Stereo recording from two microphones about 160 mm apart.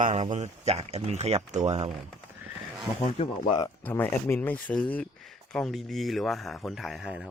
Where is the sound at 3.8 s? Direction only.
10° left (ahead or behind); by 7.3 s 5° right (ahead or behind).